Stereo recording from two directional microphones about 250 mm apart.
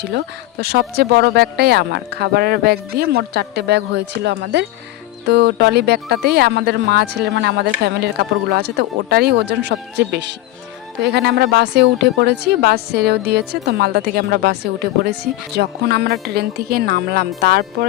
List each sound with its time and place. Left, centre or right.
0.6 s speech: right